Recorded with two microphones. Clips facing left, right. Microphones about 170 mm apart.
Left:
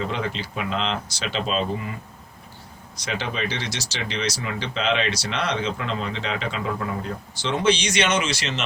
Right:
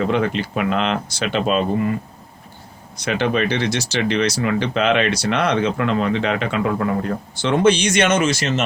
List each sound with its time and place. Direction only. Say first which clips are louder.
0.1 s speech: right 8 dB; 60° right (ahead or behind)
3.0 s speech: right 9 dB; 60° right (ahead or behind)